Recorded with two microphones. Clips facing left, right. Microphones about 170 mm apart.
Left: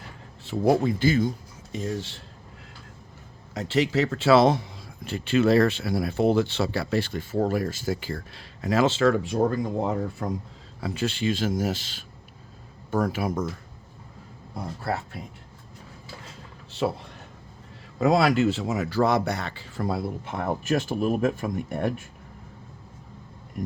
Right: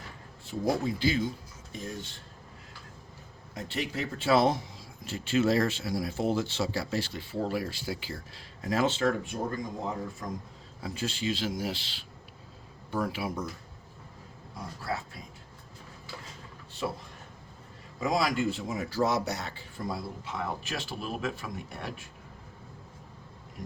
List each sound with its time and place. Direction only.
0.4 s speech: 65° left (ahead or behind); by 1.3 s 45° left (ahead or behind)
1.7 s speech: 90° left
3.5 s a man's voice: 90° left
5.0 s speech: 60° left (ahead or behind); by 10.2 s 85° left
10.8 s speech: 70° left (ahead or behind); by 13.4 s 45° left (ahead or behind)
14.8 s speech: 65° left (ahead or behind)
18.0 s speech: 65° left (ahead or behind); by 22.0 s 50° left (ahead or behind)